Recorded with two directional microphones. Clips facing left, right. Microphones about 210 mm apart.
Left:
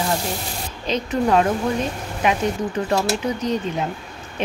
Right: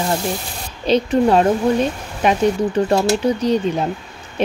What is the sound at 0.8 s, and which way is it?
Speech, 35° right (ahead or behind).